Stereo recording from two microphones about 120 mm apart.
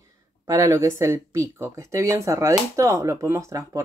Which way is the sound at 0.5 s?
25° right (ahead or behind).